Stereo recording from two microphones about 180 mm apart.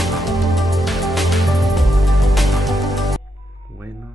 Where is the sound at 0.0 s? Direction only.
Centre (ahead or behind).